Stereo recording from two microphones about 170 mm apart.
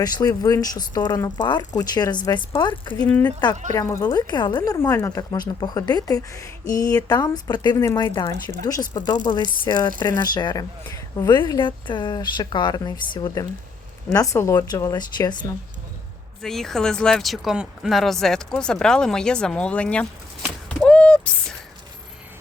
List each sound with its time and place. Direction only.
0.0 s a woman's voice: 20° left (ahead or behind)
3.0 s a woman's voice: 10° left (ahead or behind); by 15.5 s 25° left (ahead or behind)
16.4 s speech: centre (ahead or behind)
20.7 s a sound: 5° left (ahead or behind)